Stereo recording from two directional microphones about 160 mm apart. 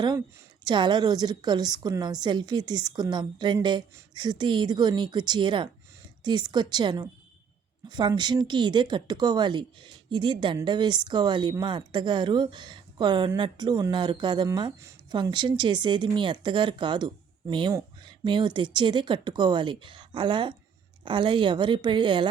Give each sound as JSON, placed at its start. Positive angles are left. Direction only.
{"t": 0.6, "sound": "a woman's voice", "side_deg": -30}